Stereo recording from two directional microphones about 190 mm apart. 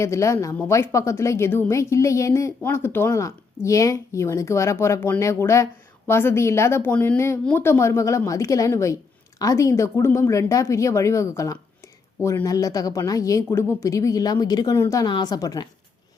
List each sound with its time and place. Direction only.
0.0 s a woman's voice: 15° left (ahead or behind)